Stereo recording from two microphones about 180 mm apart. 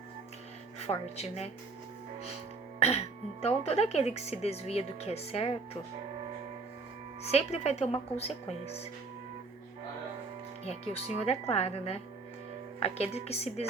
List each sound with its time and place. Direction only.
0.8 s speech: 35° left (ahead or behind)
2.8 s speech: 35° left (ahead or behind)
7.3 s speech: 35° left (ahead or behind)
11.2 s speech: 35° left (ahead or behind)